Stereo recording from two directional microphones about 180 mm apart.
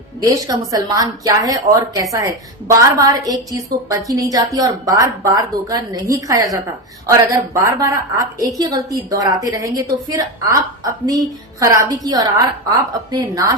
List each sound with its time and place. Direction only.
0.3 s a woman's voice: 20° right (ahead or behind)